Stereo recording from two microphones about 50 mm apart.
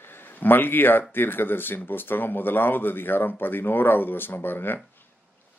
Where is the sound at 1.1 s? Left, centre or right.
Left.